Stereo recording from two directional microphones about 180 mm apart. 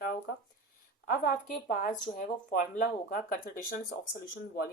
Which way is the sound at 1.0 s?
50° left (ahead or behind).